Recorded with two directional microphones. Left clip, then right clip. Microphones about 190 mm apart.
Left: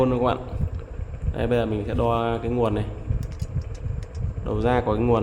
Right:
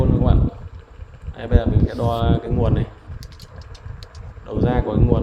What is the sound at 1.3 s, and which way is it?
Speech, 20° left (ahead or behind).